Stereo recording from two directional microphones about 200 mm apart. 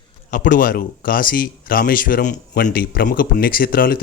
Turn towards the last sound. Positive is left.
turn(degrees=50)  # may be behind; listen again after turning